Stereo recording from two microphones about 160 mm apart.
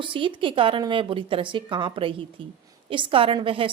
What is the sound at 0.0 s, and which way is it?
A woman's voice, 30° right (ahead or behind).